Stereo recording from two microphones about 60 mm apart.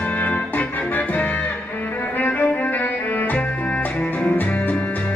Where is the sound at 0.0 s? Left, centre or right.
Left.